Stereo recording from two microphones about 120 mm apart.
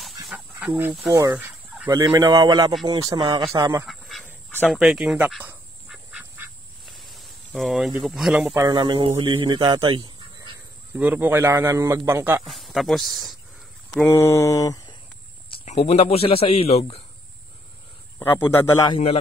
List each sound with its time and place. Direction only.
0.0 s a sound: centre (ahead or behind)
1.1 s a man's voice: 30° right (ahead or behind)
3.8 s duck: centre (ahead or behind)
4.6 s speech: 5° right (ahead or behind)
5.9 s duck: 15° right (ahead or behind)
6.9 s snake: centre (ahead or behind)
8.6 s a man's voice: 35° right (ahead or behind)
11.0 s a man's voice: 15° right (ahead or behind)
12.4 s speech: centre (ahead or behind)
14.0 s mantra: 20° left (ahead or behind)
15.6 s a man's voice: 65° left (ahead or behind)
18.4 s mantra: 20° left (ahead or behind)